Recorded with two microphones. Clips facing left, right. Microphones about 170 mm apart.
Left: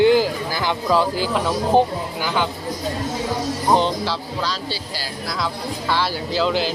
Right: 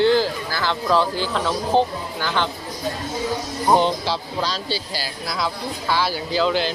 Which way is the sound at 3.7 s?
15° right (ahead or behind).